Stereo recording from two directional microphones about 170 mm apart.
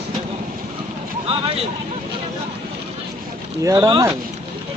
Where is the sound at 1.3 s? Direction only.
35° right (ahead or behind).